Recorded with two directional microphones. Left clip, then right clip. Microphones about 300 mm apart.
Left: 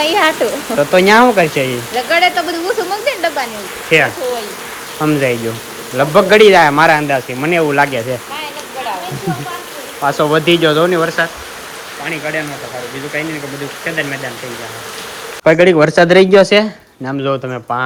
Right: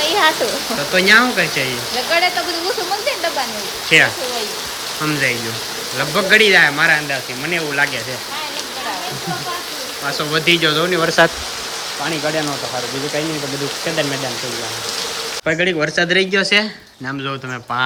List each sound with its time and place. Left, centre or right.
0.0 s a sound: left
0.9 s speech: centre
2.0 s speech: left
3.8 s speech: centre
10.2 s speech: centre
15.4 s speech: centre